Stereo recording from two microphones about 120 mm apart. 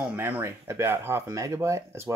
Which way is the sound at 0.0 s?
15° right (ahead or behind).